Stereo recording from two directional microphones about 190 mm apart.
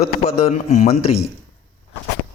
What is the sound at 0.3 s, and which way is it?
Speech, 30° left (ahead or behind).